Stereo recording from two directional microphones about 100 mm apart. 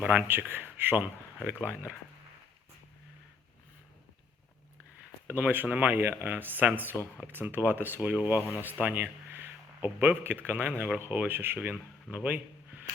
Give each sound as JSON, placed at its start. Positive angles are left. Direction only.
{"t": 0.0, "sound": "speech", "side_deg": -15}
{"t": 5.3, "sound": "a man's voice", "side_deg": -20}